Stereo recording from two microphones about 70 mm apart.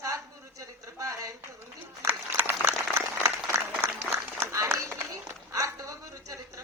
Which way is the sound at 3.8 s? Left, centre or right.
Right.